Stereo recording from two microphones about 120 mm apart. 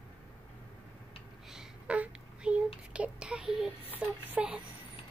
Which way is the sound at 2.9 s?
10° right (ahead or behind).